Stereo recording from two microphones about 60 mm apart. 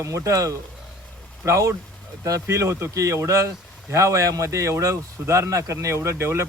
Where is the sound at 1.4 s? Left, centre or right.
Right.